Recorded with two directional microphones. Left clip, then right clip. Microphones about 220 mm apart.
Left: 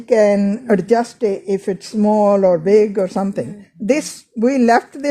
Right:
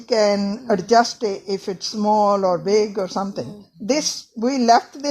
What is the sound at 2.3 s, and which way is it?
Speech, 40° left (ahead or behind).